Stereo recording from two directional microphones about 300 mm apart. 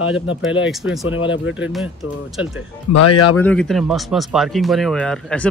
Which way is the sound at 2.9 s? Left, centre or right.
Left.